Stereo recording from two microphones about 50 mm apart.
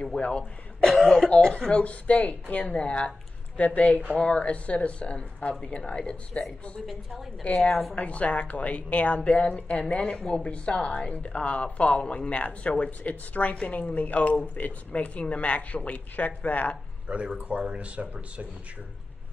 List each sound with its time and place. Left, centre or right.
0.2 s speech: left
1.0 s a woman's voice: centre
7.9 s a woman's voice: left
10.0 s speech: centre
10.4 s a woman's voice: left
17.1 s speech: right